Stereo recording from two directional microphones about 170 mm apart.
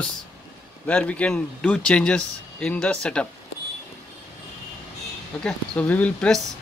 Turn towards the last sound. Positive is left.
turn(degrees=5)  # may be behind; listen again after turning